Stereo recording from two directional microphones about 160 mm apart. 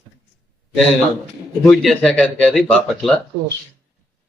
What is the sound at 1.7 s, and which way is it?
Speech, 5° left (ahead or behind).